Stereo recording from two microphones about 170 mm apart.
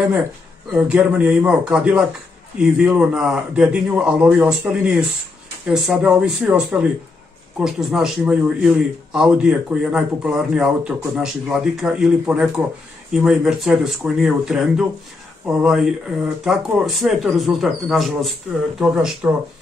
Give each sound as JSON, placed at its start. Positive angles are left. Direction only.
{"t": 0.7, "sound": "a man's voice", "side_deg": -10}